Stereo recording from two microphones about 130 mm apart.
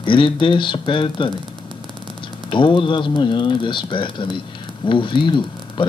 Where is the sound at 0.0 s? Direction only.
40° left (ahead or behind).